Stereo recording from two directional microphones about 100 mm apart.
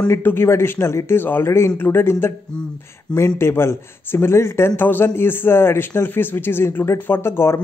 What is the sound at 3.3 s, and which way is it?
Speech, 25° left (ahead or behind).